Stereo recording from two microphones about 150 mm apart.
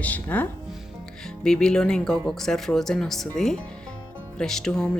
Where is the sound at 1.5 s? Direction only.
5° left (ahead or behind).